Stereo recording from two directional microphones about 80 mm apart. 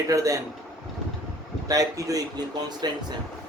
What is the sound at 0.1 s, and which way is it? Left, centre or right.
Speech, right.